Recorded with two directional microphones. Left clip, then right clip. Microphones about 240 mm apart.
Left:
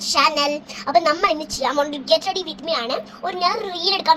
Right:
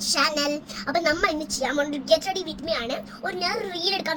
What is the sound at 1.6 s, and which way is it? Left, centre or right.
A child's voice, centre.